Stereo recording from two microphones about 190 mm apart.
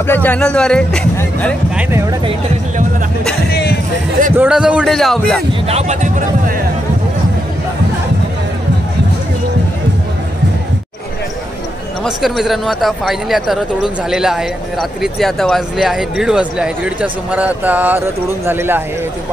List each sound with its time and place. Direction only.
0.0 s speech: 10° left (ahead or behind)
1.8 s speech: 15° right (ahead or behind)
4.4 s speech: 5° right (ahead or behind)
5.5 s speech: 35° right (ahead or behind)
12.0 s speech: centre (ahead or behind)